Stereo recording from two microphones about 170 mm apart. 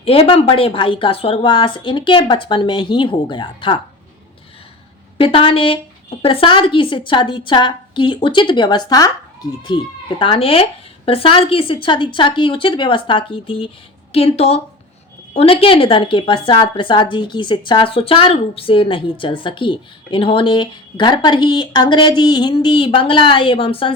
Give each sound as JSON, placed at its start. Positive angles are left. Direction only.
{"t": 0.0, "sound": "speech", "side_deg": 35}
{"t": 5.1, "sound": "a woman's voice", "side_deg": 35}